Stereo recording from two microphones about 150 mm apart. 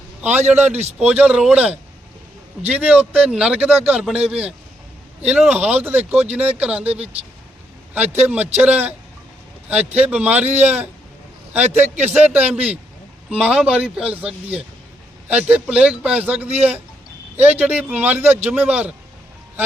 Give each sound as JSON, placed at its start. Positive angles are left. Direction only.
{"t": 0.2, "sound": "speech", "side_deg": -10}
{"t": 0.6, "sound": "a man's voice", "side_deg": -45}
{"t": 0.9, "sound": "speech", "side_deg": -10}
{"t": 7.9, "sound": "speech", "side_deg": -10}